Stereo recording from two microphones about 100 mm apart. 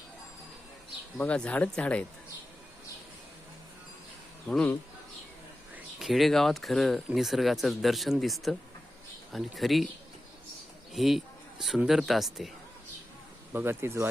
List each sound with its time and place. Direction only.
1.2 s speech: 10° left (ahead or behind)
4.4 s speech: 15° left (ahead or behind)
6.0 s speech: centre (ahead or behind)
10.9 s speech: centre (ahead or behind)
13.5 s speech: 20° right (ahead or behind)